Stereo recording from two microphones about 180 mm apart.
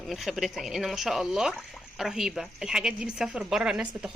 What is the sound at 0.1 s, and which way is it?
A woman's voice, centre (ahead or behind).